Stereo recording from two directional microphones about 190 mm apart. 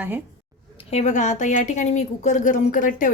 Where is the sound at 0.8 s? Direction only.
35° left (ahead or behind).